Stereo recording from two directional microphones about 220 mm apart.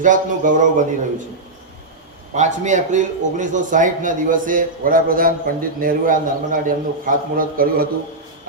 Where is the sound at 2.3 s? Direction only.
35° right (ahead or behind).